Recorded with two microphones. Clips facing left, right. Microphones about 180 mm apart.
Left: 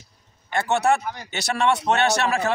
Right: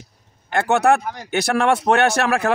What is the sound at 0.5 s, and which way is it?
Speech, 60° right (ahead or behind).